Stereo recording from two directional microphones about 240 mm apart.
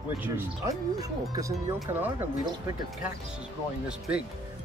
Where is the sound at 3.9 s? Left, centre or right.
Centre.